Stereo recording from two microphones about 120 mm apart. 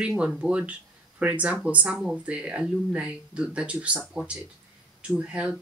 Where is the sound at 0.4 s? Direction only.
10° right (ahead or behind).